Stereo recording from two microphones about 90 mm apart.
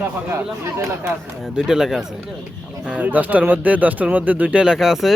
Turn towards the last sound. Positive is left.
turn(degrees=-5)  # may be behind; listen again after turning